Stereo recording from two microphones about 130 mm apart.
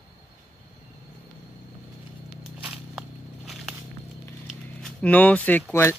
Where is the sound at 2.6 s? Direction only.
5° right (ahead or behind).